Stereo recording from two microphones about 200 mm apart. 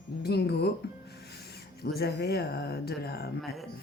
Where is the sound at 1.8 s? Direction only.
50° left (ahead or behind).